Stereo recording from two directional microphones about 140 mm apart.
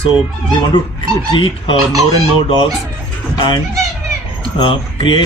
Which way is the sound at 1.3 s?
35° left (ahead or behind).